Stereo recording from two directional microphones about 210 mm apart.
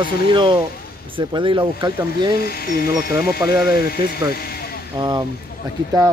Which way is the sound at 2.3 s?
45° left (ahead or behind).